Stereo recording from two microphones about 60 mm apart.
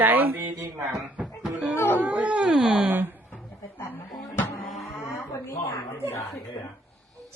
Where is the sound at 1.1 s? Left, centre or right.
Centre.